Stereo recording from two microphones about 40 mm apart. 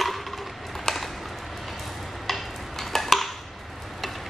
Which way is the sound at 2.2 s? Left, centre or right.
Centre.